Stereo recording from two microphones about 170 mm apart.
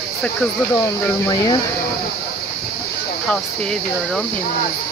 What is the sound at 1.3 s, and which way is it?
Speech, 20° left (ahead or behind).